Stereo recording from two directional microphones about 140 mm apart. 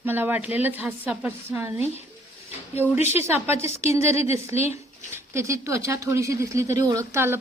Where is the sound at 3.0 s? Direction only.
50° left (ahead or behind).